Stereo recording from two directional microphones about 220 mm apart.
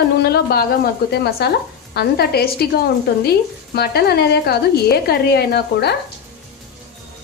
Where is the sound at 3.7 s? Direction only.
45° left (ahead or behind).